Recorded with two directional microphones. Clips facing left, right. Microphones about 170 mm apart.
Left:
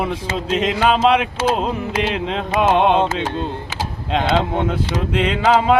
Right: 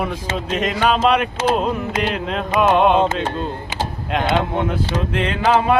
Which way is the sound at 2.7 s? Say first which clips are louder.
Right 1 dB; 20° left (ahead or behind).